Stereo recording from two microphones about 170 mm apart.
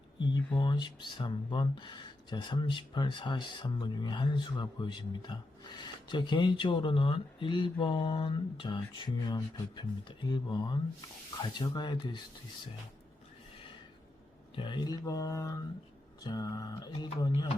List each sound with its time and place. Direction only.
0.2 s speech: 25° left (ahead or behind)
14.5 s speech: 30° left (ahead or behind)